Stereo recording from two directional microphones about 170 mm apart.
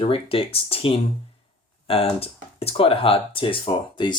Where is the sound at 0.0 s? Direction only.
35° left (ahead or behind).